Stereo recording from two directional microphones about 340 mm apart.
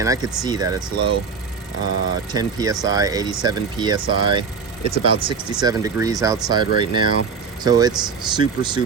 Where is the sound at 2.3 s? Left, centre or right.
Centre.